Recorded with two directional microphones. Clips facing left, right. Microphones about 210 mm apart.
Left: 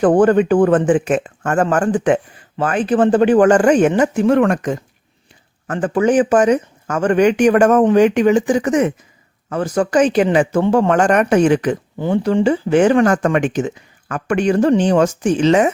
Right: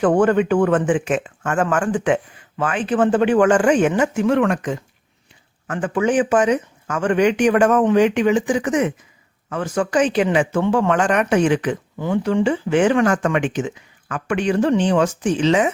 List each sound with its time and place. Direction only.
0.0 s speech: 35° left (ahead or behind)